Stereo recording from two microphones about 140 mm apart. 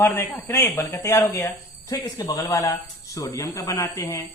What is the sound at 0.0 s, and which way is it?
Speech, 15° left (ahead or behind).